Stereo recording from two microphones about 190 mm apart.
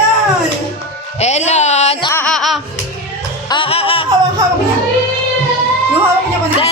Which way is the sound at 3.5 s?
30° left (ahead or behind).